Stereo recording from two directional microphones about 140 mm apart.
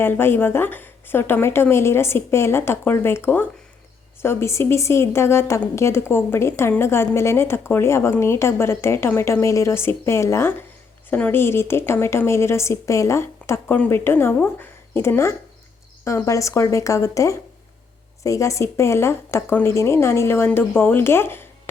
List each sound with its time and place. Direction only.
0.0 s a woman's voice: 15° left (ahead or behind)